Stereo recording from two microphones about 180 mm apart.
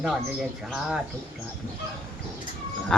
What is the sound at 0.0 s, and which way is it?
Speech, centre (ahead or behind).